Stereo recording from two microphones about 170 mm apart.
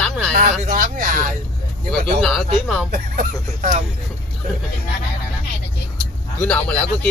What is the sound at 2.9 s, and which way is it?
Speech, 50° right (ahead or behind).